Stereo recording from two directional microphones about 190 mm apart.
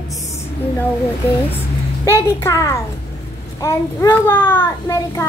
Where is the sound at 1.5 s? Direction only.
15° left (ahead or behind).